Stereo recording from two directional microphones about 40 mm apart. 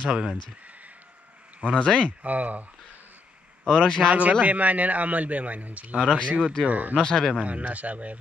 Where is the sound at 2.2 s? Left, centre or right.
Right.